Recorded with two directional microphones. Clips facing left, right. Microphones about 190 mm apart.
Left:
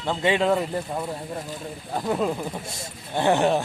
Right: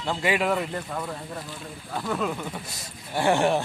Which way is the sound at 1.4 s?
35° left (ahead or behind).